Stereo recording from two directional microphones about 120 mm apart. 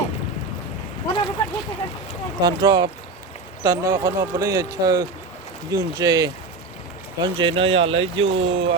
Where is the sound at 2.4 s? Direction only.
35° right (ahead or behind).